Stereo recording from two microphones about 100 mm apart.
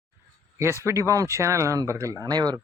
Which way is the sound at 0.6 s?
25° right (ahead or behind).